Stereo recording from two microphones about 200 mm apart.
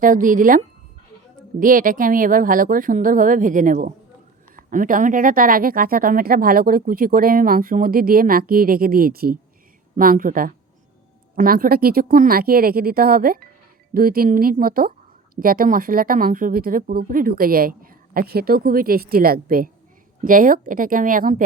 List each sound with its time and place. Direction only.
0.0 s speech: 40° right (ahead or behind)